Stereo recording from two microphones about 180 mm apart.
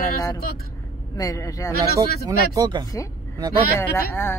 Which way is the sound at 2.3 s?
20° right (ahead or behind).